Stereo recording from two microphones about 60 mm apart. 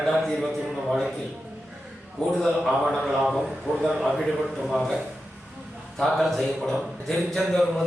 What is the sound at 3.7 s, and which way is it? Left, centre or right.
Speech, right.